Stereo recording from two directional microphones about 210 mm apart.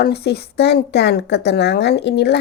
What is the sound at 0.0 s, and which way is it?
Speech, 50° left (ahead or behind).